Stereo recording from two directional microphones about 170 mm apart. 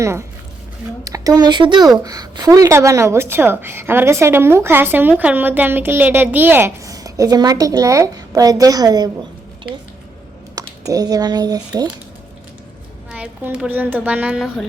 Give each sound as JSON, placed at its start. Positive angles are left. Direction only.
{"t": 0.0, "sound": "a woman's voice", "side_deg": -15}
{"t": 10.8, "sound": "speech", "side_deg": -20}
{"t": 13.1, "sound": "a woman's voice", "side_deg": -10}